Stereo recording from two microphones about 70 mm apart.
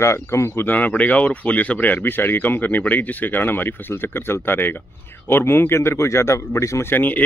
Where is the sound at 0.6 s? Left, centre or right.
Left.